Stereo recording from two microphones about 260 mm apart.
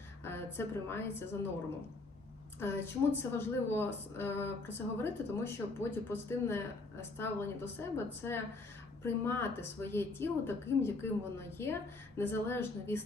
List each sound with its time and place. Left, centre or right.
0.3 s a woman's voice: centre
2.6 s a woman's voice: centre